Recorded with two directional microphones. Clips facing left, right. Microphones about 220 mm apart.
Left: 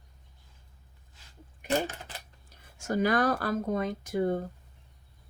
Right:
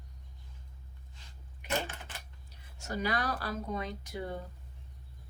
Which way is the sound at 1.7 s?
40° left (ahead or behind).